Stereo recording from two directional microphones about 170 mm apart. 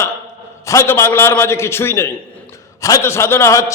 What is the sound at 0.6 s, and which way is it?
A man's voice, 15° left (ahead or behind).